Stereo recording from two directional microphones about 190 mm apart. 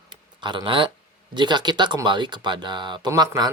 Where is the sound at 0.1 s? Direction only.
25° right (ahead or behind).